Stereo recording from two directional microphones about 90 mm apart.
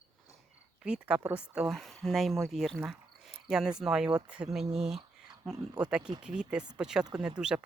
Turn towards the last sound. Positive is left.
turn(degrees=-10)  # may be behind; listen again after turning